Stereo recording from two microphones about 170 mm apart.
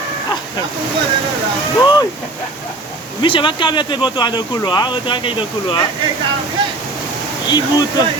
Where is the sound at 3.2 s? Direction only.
30° left (ahead or behind).